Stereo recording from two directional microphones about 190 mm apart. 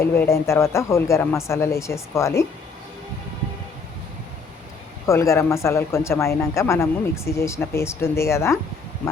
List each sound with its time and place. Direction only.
0.0 s speech: 15° left (ahead or behind)
5.0 s speech: 15° left (ahead or behind)